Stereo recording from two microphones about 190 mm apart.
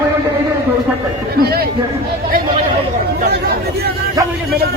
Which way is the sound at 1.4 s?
55° right (ahead or behind).